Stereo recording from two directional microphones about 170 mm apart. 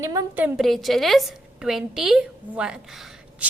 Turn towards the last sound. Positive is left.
turn(degrees=0)  # may be behind; listen again after turning